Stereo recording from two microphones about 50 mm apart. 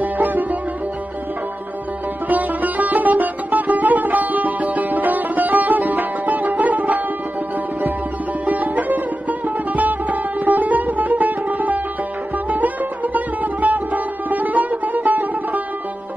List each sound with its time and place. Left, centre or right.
0.0 s sitar: right
2.2 s music: right
8.5 s sitar: right
9.7 s music: right